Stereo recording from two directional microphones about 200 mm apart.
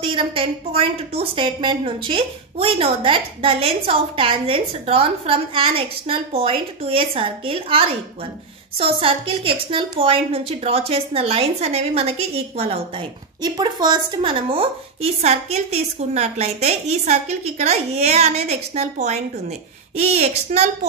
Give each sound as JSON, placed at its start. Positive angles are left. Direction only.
{"t": 0.0, "sound": "a woman's voice", "side_deg": -25}